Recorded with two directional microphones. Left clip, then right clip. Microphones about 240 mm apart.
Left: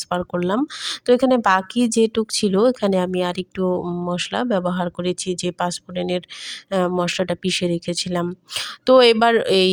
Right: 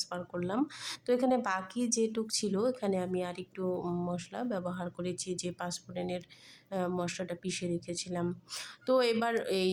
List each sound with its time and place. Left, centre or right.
0.1 s speech: left